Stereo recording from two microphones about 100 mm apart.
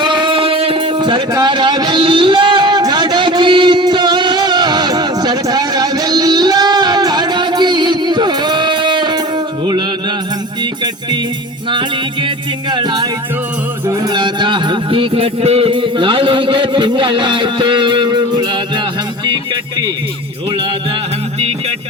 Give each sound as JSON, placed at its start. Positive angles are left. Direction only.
{"t": 0.0, "sound": "singing", "side_deg": -50}
{"t": 1.3, "sound": "a sound", "side_deg": -45}
{"t": 12.7, "sound": "speech", "side_deg": -45}
{"t": 14.1, "sound": "music", "side_deg": -50}